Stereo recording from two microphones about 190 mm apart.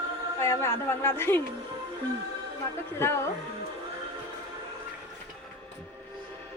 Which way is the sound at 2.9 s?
10° left (ahead or behind).